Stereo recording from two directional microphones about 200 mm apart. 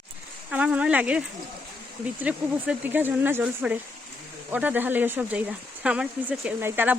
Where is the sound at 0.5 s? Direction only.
5° right (ahead or behind).